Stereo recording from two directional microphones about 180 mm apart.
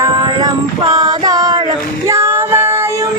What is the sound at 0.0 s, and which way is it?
Female singing, 20° right (ahead or behind).